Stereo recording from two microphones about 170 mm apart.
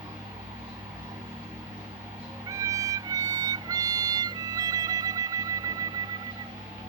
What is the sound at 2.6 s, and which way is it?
Music, 20° right (ahead or behind).